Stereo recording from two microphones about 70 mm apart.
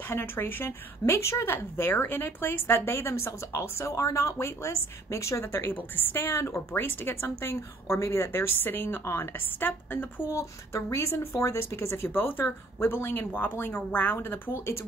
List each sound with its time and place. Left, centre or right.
0.1 s a woman's voice: left
10.3 s a woman's voice: left